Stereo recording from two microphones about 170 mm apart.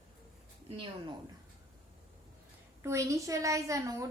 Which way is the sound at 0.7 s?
30° right (ahead or behind).